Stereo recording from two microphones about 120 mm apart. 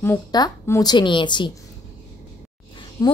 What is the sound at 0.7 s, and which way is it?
Speech, 35° left (ahead or behind).